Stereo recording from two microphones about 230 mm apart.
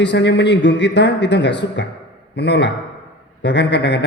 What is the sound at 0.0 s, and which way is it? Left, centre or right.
A man's voice, left.